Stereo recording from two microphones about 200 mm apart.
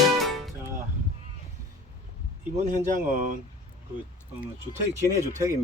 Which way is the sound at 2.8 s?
40° right (ahead or behind).